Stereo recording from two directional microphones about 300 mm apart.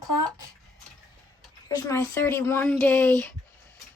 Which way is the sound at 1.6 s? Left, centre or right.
Centre.